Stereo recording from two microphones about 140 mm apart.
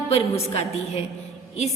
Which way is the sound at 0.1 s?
45° left (ahead or behind).